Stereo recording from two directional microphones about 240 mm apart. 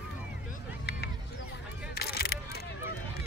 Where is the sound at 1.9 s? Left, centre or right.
Left.